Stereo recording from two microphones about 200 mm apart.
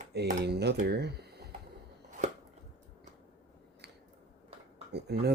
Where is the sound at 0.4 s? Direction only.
55° right (ahead or behind).